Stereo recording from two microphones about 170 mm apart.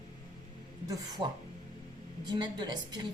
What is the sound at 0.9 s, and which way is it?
Speech, 20° right (ahead or behind).